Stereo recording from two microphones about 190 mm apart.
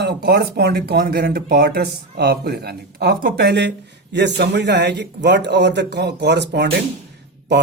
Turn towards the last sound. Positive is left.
turn(degrees=-65)  # may be behind; listen again after turning